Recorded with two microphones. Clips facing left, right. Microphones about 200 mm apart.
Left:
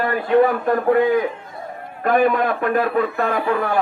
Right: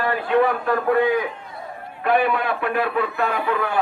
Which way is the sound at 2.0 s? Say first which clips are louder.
Left 3 dB; 40° left (ahead or behind).